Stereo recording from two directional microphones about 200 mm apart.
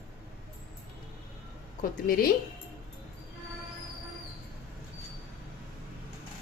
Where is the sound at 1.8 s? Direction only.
45° left (ahead or behind).